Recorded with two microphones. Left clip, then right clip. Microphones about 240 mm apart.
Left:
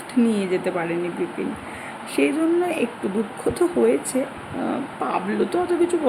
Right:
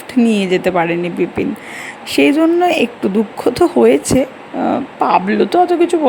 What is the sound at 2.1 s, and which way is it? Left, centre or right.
Speech, right.